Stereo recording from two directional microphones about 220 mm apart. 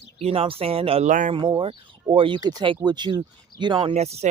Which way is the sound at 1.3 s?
20° right (ahead or behind).